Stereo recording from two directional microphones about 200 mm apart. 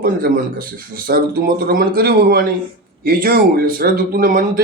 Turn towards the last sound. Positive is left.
turn(degrees=-45)  # may be behind; listen again after turning